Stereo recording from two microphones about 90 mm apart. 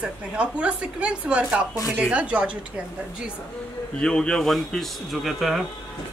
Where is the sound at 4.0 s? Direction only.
10° left (ahead or behind).